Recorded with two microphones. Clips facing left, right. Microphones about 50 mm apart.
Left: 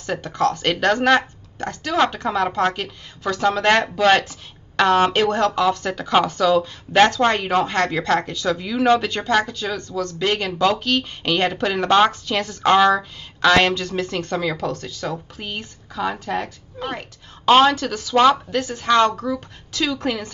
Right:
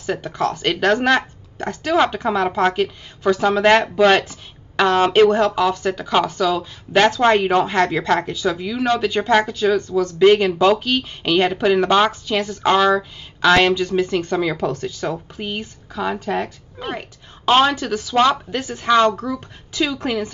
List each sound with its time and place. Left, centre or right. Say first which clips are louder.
0.0 s speech: left 1 dB; centre